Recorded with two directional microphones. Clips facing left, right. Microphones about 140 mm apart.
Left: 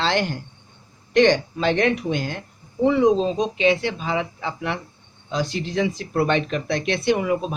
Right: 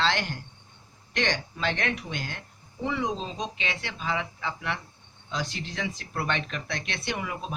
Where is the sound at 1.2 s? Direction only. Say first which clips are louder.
Left 10 dB; 30° left (ahead or behind).